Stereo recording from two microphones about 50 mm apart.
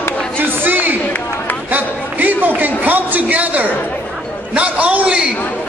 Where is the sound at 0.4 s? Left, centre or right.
Right.